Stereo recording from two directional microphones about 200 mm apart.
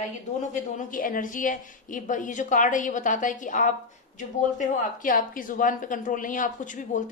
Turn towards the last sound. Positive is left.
turn(degrees=40)  # may be behind; listen again after turning